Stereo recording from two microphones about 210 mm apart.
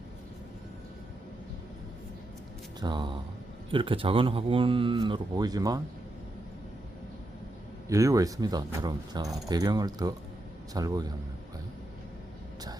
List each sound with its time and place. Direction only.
2.8 s speech: 20° right (ahead or behind)
7.9 s speech: 15° right (ahead or behind)